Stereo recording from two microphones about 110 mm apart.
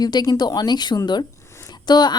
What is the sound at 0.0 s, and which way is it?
Speech, 40° left (ahead or behind).